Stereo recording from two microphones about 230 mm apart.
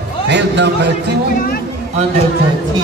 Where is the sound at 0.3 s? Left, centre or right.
Right.